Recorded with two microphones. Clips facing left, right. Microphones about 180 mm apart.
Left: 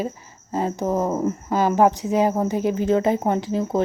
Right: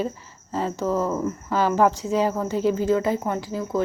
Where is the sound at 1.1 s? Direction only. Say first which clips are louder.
Left 3 dB; 35° left (ahead or behind).